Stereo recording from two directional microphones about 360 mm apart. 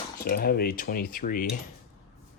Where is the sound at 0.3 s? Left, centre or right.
Left.